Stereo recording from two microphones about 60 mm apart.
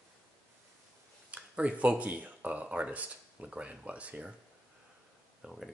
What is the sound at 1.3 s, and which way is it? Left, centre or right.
Speech, right.